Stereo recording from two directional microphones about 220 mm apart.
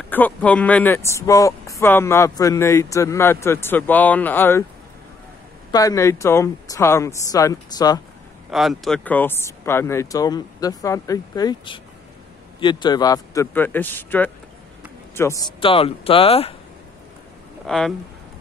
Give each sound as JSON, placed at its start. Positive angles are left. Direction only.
{"t": 0.1, "sound": "speech", "side_deg": 5}
{"t": 5.7, "sound": "speech", "side_deg": 15}
{"t": 8.5, "sound": "speech", "side_deg": 0}
{"t": 15.6, "sound": "speech", "side_deg": 25}
{"t": 17.6, "sound": "speech", "side_deg": 0}